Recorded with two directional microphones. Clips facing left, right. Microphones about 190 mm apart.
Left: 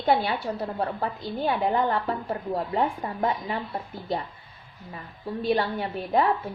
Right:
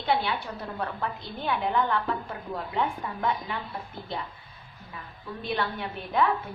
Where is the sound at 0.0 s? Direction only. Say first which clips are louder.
Left 4 dB; 45° left (ahead or behind).